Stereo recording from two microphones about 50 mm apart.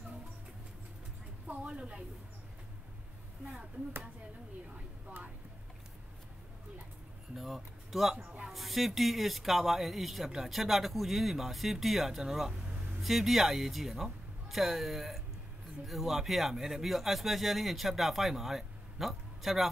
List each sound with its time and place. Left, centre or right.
1.5 s speech: right
7.3 s speech: centre